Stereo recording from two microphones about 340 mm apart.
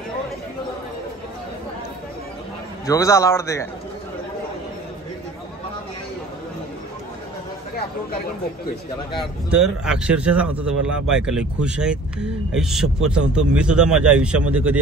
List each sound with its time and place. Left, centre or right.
2.9 s a man's voice: centre
9.2 s speech: centre